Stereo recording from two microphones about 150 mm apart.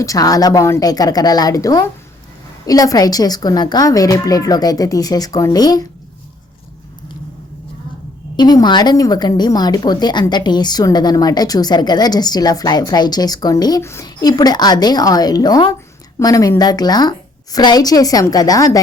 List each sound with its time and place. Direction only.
0.0 s a woman's voice: 25° left (ahead or behind)
8.4 s a woman's voice: 30° left (ahead or behind)